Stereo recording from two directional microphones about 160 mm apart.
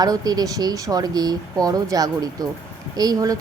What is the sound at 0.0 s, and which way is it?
Speech, 25° right (ahead or behind).